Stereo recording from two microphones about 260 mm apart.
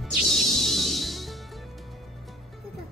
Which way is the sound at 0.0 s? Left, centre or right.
Centre.